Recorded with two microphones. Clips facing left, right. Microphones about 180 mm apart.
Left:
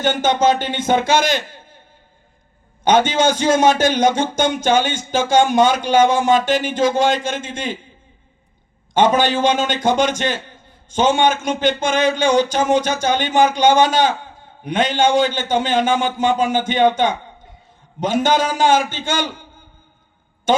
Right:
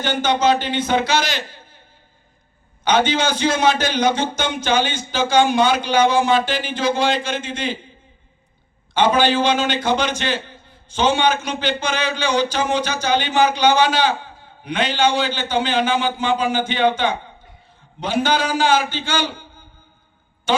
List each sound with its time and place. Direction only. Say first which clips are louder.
0.0 s a man's voice: left 2 dB; 45° left (ahead or behind)
2.8 s a man's voice: left 3 dB; 45° left (ahead or behind)
9.0 s a man's voice: left 1 dB; 45° left (ahead or behind)
20.5 s a sound: left 3 dB; 45° left (ahead or behind)